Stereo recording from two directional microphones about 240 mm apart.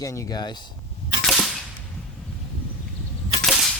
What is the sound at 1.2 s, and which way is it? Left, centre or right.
Cap gun, centre.